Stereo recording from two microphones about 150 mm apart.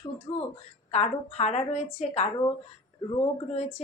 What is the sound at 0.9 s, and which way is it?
A woman's voice, 50° left (ahead or behind).